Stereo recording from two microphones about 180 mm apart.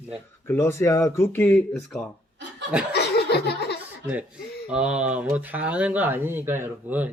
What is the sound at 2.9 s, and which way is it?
Laughter, 65° left (ahead or behind).